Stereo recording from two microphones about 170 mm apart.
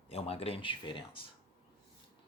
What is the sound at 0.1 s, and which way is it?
Speech, 35° left (ahead or behind).